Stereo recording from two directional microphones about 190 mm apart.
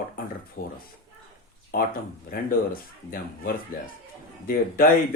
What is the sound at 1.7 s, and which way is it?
Speech, 50° left (ahead or behind).